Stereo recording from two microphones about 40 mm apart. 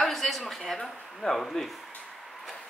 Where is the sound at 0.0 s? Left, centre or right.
Centre.